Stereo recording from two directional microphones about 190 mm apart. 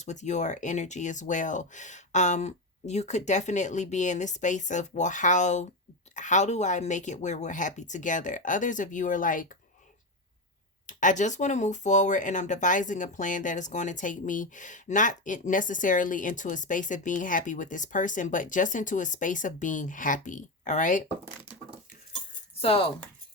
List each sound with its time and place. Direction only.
0.0 s speech: 40° left (ahead or behind)
10.8 s speech: 40° left (ahead or behind)
22.5 s speech: 30° left (ahead or behind)